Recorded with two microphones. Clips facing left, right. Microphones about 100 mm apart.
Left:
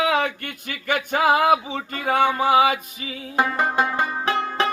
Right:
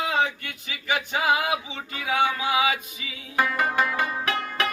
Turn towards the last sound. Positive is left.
turn(degrees=30)  # may be behind; listen again after turning